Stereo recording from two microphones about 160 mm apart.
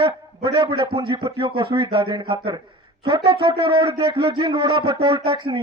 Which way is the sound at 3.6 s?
35° right (ahead or behind).